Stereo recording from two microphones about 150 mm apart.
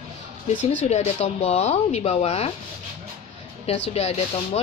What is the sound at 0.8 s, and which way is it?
A woman's voice, 50° left (ahead or behind).